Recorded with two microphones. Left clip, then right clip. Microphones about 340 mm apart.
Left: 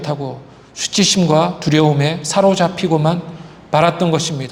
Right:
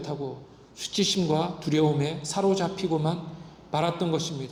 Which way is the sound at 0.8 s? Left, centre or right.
Left.